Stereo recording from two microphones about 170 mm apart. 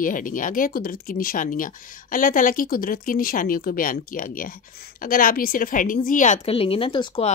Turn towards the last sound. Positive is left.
turn(degrees=30)  # may be behind; listen again after turning